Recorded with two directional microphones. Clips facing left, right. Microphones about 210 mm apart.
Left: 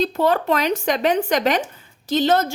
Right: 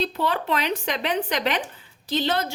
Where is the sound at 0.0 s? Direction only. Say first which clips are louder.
Left 6 dB; 45° left (ahead or behind).